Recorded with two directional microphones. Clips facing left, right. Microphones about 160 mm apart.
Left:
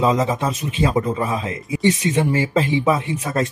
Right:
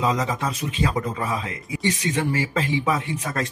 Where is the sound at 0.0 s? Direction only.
25° left (ahead or behind).